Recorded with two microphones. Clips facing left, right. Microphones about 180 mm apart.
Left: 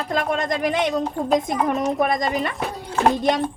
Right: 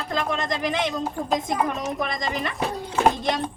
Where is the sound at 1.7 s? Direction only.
55° left (ahead or behind).